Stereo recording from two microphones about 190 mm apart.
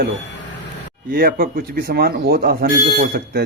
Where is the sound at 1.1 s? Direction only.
50° right (ahead or behind).